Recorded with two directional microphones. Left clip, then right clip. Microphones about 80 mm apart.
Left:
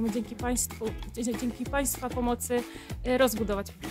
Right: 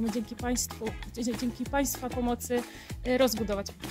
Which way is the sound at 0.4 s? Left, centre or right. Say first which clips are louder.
Left 1 dB; left.